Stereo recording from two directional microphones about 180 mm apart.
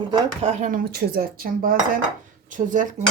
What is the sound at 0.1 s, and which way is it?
Speech, 35° right (ahead or behind).